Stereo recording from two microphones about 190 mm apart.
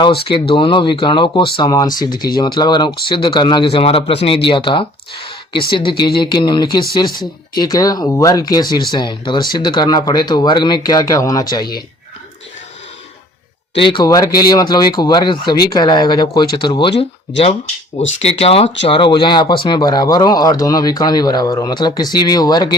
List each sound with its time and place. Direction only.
0.3 s speech: 25° left (ahead or behind)
13.7 s speech: 25° left (ahead or behind)